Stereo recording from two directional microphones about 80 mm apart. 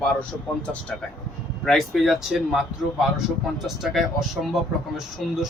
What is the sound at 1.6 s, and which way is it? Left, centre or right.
Speech, centre.